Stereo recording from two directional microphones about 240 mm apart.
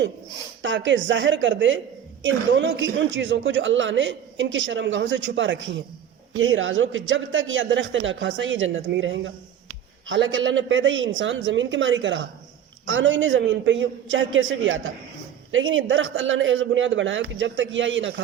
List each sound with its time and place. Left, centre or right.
0.6 s a woman's voice: right